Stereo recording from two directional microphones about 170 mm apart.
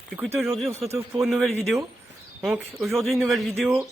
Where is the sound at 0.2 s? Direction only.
5° right (ahead or behind).